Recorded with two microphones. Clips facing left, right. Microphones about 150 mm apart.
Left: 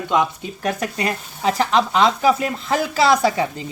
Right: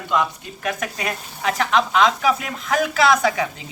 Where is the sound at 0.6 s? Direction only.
35° left (ahead or behind).